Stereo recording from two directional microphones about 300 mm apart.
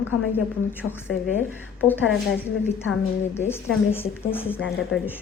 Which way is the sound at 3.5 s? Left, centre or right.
Centre.